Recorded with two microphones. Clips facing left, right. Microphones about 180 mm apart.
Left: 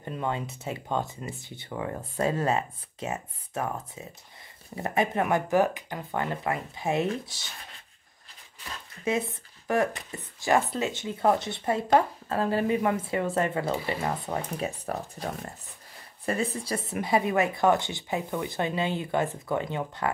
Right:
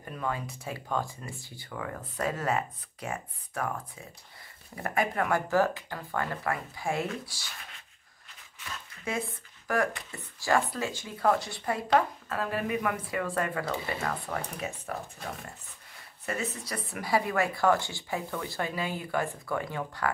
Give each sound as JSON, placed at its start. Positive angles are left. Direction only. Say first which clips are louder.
{"t": 0.0, "sound": "speech", "louder": "left 3 dB", "side_deg": 25}
{"t": 8.5, "sound": "a sound", "louder": "left 1 dB", "side_deg": 35}
{"t": 9.0, "sound": "speech", "louder": "left 6 dB", "side_deg": 20}
{"t": 16.3, "sound": "speech", "louder": "left 6 dB", "side_deg": 30}